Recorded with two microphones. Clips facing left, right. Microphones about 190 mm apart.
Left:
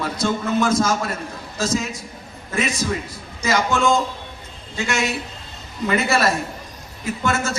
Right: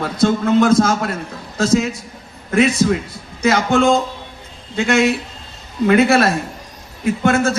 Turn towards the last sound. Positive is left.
turn(degrees=-55)  # may be behind; listen again after turning